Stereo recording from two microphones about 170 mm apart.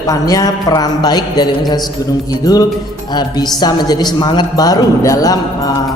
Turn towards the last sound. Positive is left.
turn(degrees=20)  # may be behind; listen again after turning